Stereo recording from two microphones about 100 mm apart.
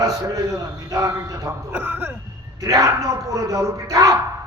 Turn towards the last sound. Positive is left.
turn(degrees=-35)  # may be behind; listen again after turning